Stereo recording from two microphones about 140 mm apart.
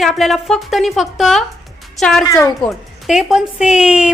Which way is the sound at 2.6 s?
Centre (ahead or behind).